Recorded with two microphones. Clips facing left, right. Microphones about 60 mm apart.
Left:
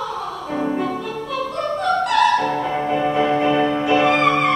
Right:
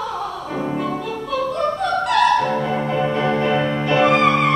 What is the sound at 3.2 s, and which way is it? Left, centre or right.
Music, centre.